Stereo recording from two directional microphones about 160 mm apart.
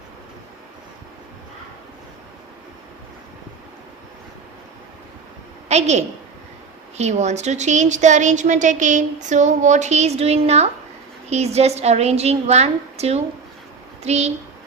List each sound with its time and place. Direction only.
5.6 s a woman's voice: 45° right (ahead or behind)